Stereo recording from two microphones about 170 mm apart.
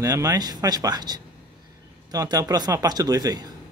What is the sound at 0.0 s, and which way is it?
A man's voice, 20° right (ahead or behind).